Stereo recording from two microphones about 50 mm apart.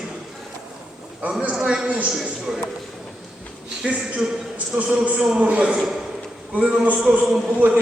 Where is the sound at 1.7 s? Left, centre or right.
Right.